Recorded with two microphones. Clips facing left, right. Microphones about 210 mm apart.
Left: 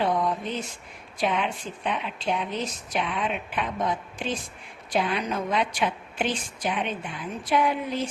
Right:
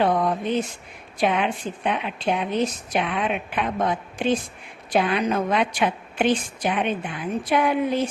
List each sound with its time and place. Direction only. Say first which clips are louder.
0.0 s a woman's voice: right 4 dB; 60° right (ahead or behind)